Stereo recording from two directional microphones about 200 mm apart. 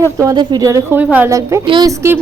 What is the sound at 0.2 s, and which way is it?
A woman's voice, 20° right (ahead or behind).